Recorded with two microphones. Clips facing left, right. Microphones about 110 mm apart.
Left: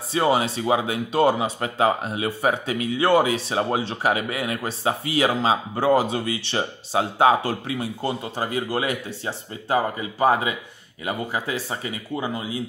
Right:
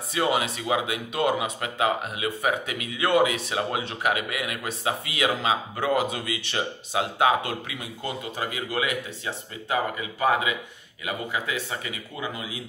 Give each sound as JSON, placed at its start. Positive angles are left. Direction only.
{"t": 0.1, "sound": "speech", "side_deg": 30}